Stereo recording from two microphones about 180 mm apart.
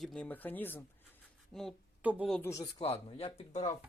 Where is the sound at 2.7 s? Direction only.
30° left (ahead or behind).